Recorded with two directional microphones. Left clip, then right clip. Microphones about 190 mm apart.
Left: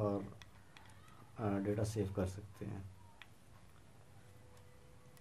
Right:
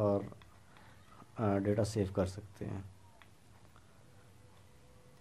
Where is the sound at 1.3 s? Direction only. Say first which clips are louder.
Right 6 dB; 45° right (ahead or behind).